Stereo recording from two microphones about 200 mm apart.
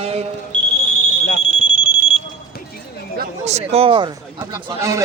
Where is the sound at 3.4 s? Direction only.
35° right (ahead or behind); by 5.0 s 15° right (ahead or behind).